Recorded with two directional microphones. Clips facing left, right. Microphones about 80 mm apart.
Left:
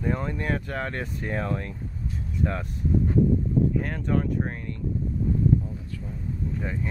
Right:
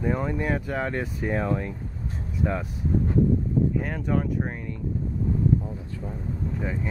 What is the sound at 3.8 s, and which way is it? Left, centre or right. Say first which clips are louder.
Speech: even; centre.